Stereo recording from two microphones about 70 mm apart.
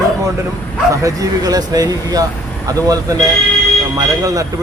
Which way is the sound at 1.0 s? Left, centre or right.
Right.